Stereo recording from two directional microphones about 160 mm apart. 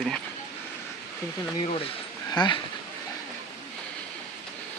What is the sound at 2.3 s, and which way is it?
Speech, 30° left (ahead or behind).